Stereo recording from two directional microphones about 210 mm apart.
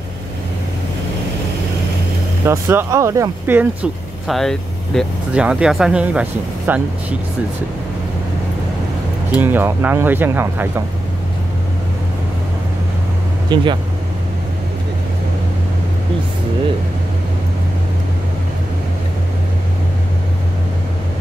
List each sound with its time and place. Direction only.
2.4 s speech: 10° right (ahead or behind)
9.3 s speech: 10° right (ahead or behind)
13.5 s speech: 20° right (ahead or behind)